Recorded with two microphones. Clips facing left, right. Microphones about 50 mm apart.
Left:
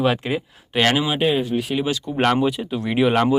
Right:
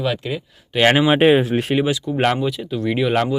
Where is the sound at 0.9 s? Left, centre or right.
Right.